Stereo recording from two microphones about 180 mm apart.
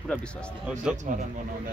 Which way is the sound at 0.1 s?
5° left (ahead or behind).